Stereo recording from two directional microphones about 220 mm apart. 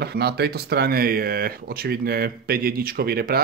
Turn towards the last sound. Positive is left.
turn(degrees=-45)  # may be behind; listen again after turning